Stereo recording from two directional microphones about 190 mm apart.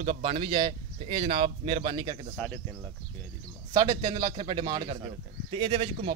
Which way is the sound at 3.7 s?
20° right (ahead or behind).